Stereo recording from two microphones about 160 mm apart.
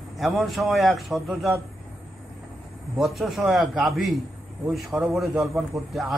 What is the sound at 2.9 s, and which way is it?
A man's voice, centre (ahead or behind).